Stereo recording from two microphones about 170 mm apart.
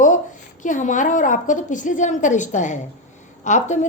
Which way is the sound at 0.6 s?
45° left (ahead or behind).